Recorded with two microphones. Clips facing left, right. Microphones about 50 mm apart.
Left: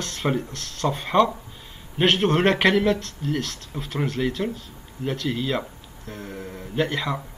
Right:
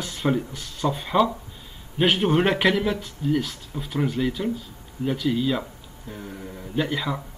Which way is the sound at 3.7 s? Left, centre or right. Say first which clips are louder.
Right 1 dB; centre.